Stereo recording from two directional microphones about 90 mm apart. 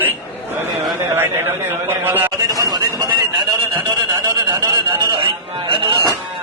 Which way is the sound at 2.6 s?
45° right (ahead or behind).